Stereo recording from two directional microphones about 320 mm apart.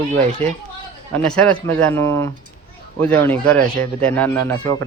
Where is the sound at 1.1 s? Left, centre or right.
Centre.